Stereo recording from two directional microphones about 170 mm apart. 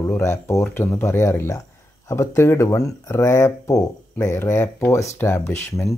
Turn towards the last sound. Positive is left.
turn(degrees=15)  # may be behind; listen again after turning